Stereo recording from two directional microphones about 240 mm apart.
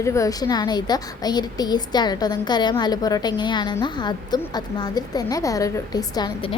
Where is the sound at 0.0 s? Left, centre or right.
Centre.